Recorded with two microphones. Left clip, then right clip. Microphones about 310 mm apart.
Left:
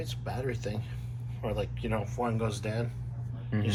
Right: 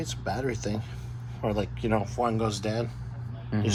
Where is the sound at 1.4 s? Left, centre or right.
Right.